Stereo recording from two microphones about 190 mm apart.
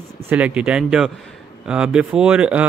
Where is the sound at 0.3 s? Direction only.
5° right (ahead or behind).